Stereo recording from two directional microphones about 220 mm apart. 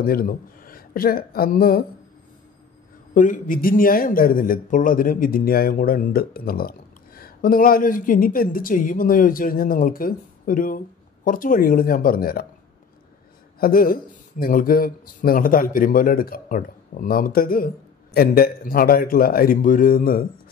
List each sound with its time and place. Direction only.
0.0 s a woman's voice: 40° left (ahead or behind)
3.2 s speech: 40° left (ahead or behind)
13.6 s speech: 40° left (ahead or behind)